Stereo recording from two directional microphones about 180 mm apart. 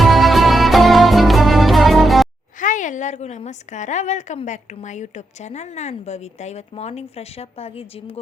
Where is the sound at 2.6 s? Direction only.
45° left (ahead or behind).